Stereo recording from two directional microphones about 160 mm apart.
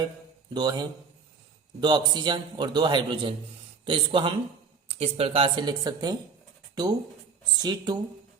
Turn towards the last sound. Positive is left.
turn(degrees=-25)  # may be behind; listen again after turning